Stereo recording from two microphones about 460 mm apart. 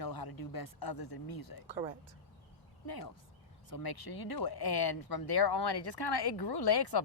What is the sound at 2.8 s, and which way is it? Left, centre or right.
Speech, left.